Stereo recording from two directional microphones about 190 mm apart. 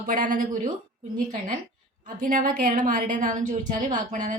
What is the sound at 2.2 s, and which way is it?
A woman's voice, 45° right (ahead or behind).